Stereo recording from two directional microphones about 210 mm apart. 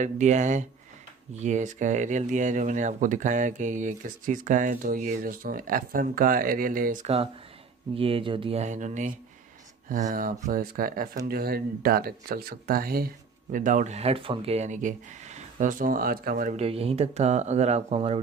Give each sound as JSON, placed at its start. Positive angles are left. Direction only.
{"t": 0.0, "sound": "speech", "side_deg": -35}
{"t": 16.6, "sound": "speech", "side_deg": -30}